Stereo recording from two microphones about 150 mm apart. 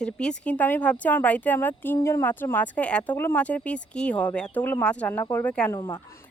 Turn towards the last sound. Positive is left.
turn(degrees=30)  # may be behind; listen again after turning